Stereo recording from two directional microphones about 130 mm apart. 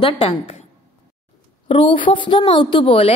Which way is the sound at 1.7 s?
40° left (ahead or behind).